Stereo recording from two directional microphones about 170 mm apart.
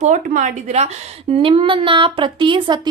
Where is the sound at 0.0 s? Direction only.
45° right (ahead or behind).